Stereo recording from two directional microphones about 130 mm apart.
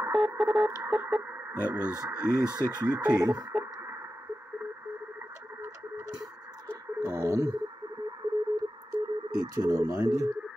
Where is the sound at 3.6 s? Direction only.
20° right (ahead or behind).